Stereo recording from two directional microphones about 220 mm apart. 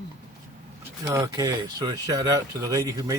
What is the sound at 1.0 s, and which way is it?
Speech, 15° right (ahead or behind).